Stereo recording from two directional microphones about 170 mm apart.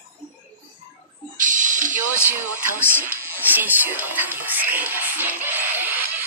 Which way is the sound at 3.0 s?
10° right (ahead or behind).